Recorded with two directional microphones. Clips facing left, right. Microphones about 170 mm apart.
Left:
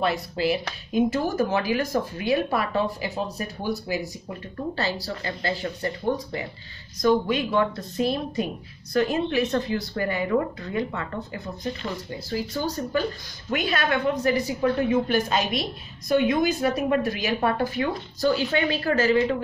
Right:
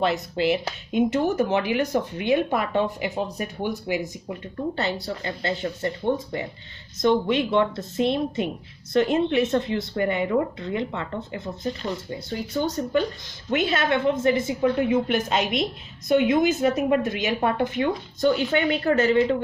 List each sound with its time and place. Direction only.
0.0 s speech: 25° right (ahead or behind)